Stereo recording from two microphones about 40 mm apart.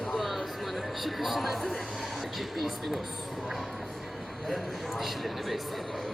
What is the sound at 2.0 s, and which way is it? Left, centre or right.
Speech, centre.